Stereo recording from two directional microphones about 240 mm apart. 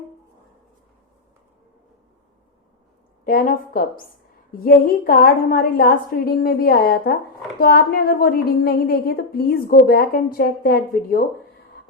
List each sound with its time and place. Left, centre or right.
3.2 s speech: left